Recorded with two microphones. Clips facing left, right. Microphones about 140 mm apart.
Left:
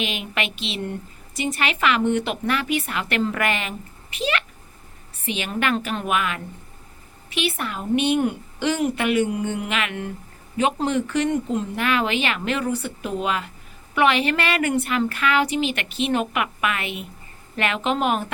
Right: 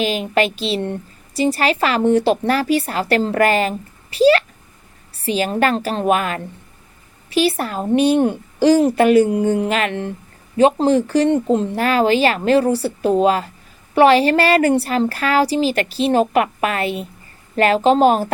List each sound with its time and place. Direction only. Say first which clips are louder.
0.0 s a woman's voice: right 9 dB; 35° right (ahead or behind)